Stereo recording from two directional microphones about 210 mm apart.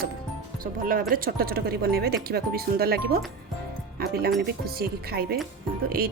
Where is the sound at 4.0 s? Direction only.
50° right (ahead or behind).